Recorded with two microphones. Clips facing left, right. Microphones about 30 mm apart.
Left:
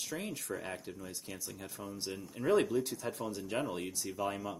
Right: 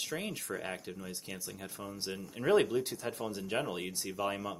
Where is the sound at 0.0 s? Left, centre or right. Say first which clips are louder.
Right 2 dB; right.